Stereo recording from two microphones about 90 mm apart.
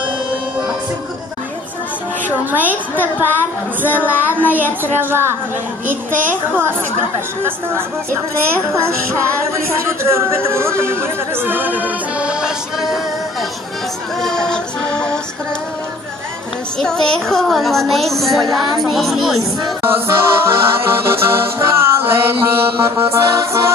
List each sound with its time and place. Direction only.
2.5 s music: 20° right (ahead or behind)
10.0 s music: 30° right (ahead or behind); by 13.0 s 5° right (ahead or behind)
14.2 s music: 5° left (ahead or behind)
16.7 s speech: 5° left (ahead or behind)
19.8 s music: 25° right (ahead or behind)